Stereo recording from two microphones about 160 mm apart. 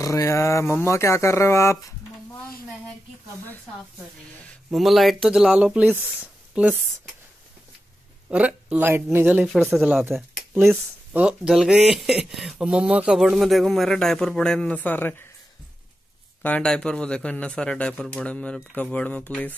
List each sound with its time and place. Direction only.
0.0 s a man's voice: 20° left (ahead or behind)
4.6 s speech: centre (ahead or behind)
8.3 s speech: 10° right (ahead or behind); by 15.2 s 10° left (ahead or behind)
16.4 s a man's voice: 5° left (ahead or behind)